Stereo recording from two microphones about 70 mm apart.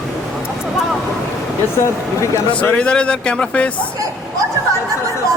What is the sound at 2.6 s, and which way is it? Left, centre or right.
Speech, centre.